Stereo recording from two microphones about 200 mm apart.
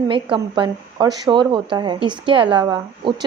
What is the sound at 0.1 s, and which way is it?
Speech, 25° right (ahead or behind).